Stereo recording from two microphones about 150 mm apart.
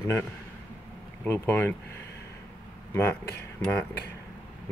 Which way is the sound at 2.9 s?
15° left (ahead or behind).